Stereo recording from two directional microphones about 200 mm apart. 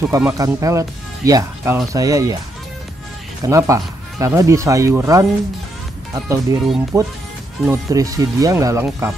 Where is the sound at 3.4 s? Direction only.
15° right (ahead or behind).